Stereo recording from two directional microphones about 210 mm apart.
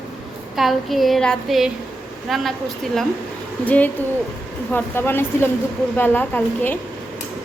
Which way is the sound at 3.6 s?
5° left (ahead or behind).